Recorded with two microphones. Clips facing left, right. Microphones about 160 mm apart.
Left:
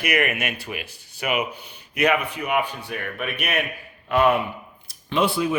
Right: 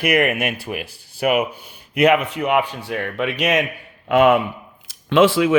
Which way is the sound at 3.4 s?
90° right.